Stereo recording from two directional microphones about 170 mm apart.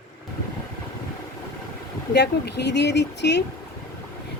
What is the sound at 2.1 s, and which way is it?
Speech, 80° left.